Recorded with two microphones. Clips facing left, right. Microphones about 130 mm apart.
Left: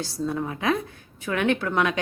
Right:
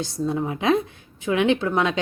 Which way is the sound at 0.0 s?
20° right (ahead or behind).